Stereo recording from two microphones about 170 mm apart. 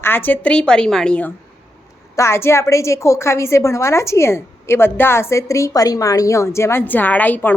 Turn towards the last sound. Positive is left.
turn(degrees=10)  # may be behind; listen again after turning